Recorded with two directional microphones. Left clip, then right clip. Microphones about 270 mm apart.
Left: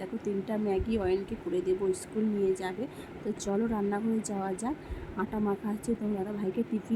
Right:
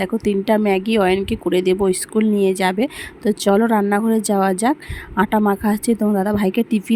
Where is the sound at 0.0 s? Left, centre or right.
Right.